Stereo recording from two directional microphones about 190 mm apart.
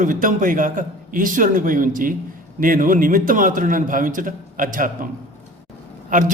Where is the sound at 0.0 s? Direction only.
45° right (ahead or behind).